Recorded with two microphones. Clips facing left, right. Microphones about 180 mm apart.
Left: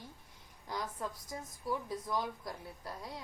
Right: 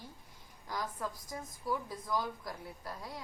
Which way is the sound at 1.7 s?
25° left (ahead or behind).